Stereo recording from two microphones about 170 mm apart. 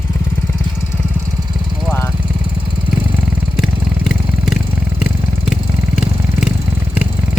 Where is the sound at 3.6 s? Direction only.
Centre (ahead or behind).